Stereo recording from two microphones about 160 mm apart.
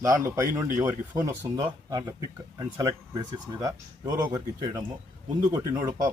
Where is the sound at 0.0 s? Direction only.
20° right (ahead or behind).